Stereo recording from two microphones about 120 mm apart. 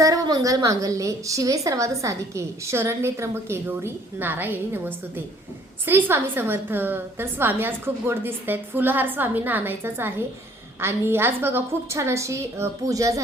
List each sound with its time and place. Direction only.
0.0 s a woman's voice: 30° right (ahead or behind)